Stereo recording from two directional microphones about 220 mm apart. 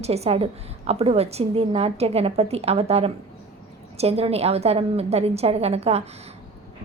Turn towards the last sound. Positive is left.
turn(degrees=-30)  # may be behind; listen again after turning